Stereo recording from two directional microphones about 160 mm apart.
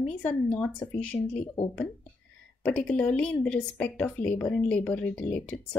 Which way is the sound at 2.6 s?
5° left (ahead or behind).